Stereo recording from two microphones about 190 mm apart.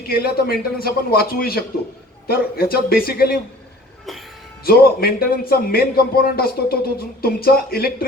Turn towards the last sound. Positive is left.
turn(degrees=50)  # may be behind; listen again after turning